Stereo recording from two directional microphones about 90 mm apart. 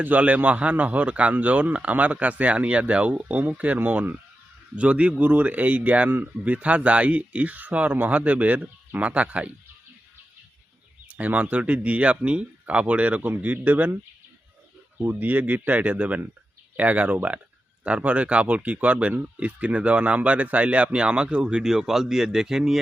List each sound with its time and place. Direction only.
0.0 s speech: 15° right (ahead or behind)
11.1 s speech: 15° right (ahead or behind)
15.1 s speech: 20° right (ahead or behind)